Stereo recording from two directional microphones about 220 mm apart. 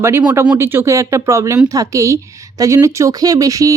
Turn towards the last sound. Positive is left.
turn(degrees=-15)  # may be behind; listen again after turning